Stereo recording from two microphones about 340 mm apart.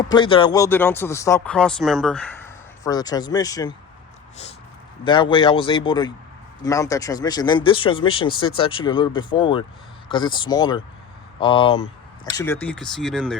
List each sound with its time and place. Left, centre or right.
0.1 s speech: centre
5.0 s speech: centre